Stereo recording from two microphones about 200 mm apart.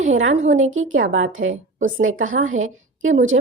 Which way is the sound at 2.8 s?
75° right (ahead or behind).